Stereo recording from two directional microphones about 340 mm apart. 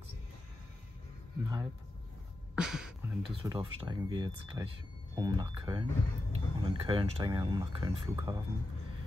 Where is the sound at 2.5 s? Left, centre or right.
Centre.